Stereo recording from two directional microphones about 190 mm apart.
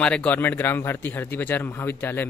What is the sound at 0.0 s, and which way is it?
Speech, 5° left (ahead or behind).